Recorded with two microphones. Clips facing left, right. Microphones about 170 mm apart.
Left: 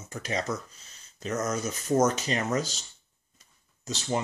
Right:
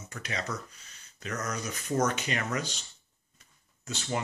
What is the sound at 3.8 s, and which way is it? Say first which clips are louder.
Speech: left 4 dB; 40° left (ahead or behind).